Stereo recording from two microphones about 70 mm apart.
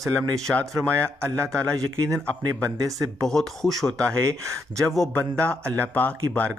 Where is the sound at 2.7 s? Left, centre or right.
Right.